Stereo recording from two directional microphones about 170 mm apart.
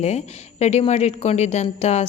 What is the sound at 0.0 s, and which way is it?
A woman's voice, 40° left (ahead or behind).